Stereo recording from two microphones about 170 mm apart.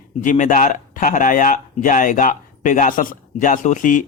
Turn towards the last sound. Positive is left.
turn(degrees=50)  # may be behind; listen again after turning